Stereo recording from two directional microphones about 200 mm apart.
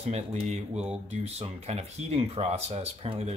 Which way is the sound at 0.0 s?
35° right (ahead or behind).